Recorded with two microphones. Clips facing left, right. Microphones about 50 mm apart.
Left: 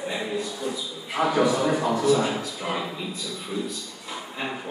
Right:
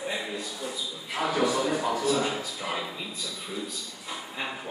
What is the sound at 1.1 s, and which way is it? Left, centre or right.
Speech, centre.